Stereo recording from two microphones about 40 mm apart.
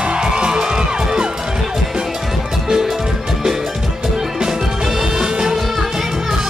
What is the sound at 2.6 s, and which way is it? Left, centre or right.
Music, centre.